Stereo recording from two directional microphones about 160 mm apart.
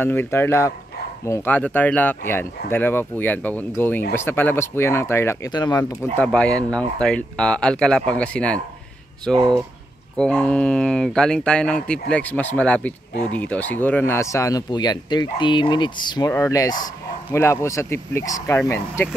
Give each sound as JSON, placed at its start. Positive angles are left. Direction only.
{"t": 0.0, "sound": "speech", "side_deg": 15}
{"t": 6.1, "sound": "speech", "side_deg": 5}